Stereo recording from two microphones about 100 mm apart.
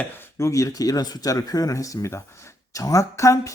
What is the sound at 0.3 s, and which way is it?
Speech, 30° left (ahead or behind).